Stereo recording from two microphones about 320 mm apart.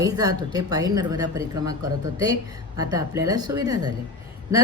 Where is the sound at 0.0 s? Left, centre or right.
Centre.